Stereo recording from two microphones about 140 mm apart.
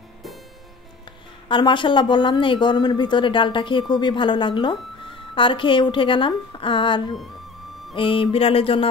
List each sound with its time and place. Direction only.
1.5 s a woman's voice: 35° left (ahead or behind)